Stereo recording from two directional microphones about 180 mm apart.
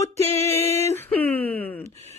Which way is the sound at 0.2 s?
35° right (ahead or behind).